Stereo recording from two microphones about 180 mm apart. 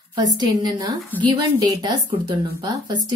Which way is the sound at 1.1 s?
10° left (ahead or behind).